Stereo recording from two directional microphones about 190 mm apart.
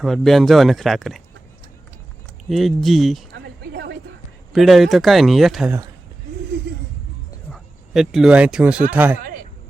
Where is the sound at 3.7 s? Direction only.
60° right (ahead or behind).